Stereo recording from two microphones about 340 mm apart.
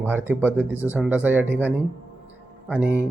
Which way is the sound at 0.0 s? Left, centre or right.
Centre.